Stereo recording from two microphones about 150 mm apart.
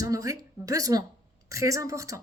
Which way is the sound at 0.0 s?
20° right (ahead or behind).